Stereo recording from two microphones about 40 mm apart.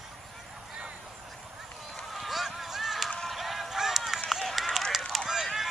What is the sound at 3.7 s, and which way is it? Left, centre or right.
Run, centre.